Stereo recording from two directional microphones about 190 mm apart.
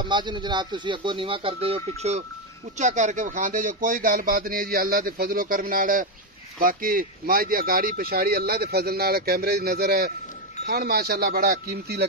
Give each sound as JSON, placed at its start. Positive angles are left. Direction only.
{"t": 0.0, "sound": "speech", "side_deg": -25}